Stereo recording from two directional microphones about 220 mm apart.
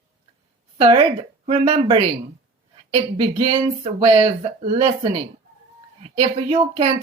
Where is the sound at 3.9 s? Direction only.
25° right (ahead or behind).